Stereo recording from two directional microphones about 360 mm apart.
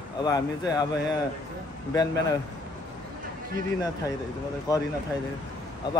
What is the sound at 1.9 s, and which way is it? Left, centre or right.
Speech, centre.